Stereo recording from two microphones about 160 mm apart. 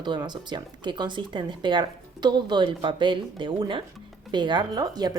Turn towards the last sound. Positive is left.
turn(degrees=-25)  # may be behind; listen again after turning